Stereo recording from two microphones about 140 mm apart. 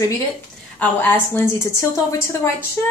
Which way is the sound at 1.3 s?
20° left (ahead or behind).